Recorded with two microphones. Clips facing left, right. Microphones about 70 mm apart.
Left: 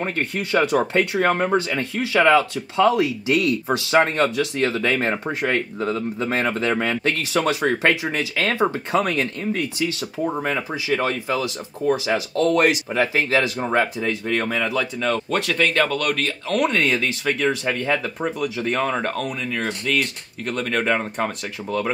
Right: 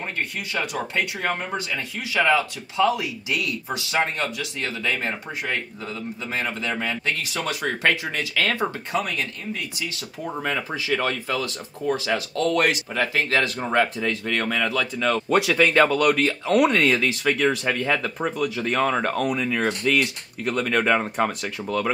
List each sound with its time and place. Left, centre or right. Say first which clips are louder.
0.6 s speech: left 8 dB; left
5.1 s speech: left 6 dB; left
6.4 s speech: left 5 dB; left
6.8 s speech: left 4 dB; left
7.4 s speech: left 2 dB; left
9.1 s speech: left 6 dB; left
10.3 s speech: left 2 dB; centre
15.2 s speech: right 2 dB; centre